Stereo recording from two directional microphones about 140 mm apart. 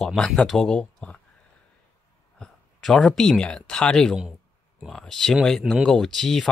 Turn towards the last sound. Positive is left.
turn(degrees=5)  # may be behind; listen again after turning